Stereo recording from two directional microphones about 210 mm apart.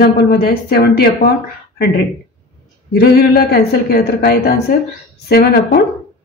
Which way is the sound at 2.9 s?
50° left (ahead or behind).